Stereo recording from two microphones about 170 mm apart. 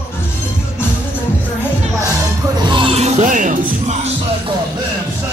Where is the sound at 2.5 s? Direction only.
25° right (ahead or behind); by 4.1 s 45° right (ahead or behind).